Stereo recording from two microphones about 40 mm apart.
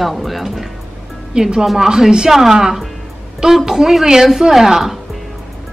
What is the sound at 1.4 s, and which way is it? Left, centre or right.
A woman's voice, centre.